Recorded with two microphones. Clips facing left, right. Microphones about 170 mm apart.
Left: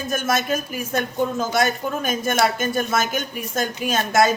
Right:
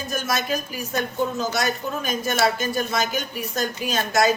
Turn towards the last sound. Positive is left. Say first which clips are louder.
# left 2 dB
turn(degrees=50)  # may be behind; listen again after turning